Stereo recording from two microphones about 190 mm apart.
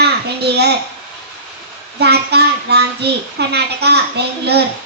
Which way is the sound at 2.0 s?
60° right (ahead or behind).